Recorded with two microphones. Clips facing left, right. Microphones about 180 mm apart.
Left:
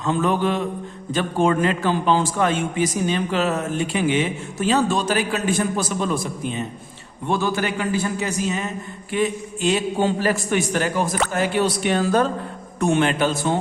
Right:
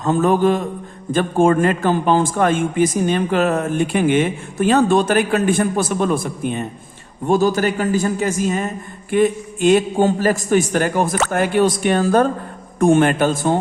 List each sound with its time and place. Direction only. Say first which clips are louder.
0.0 s a man's voice: right 5 dB; 45° right (ahead or behind)
7.3 s a man's voice: right 6 dB; 40° right (ahead or behind)